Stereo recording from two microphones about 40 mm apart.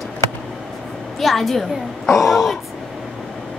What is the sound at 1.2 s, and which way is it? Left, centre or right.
A woman's voice, centre.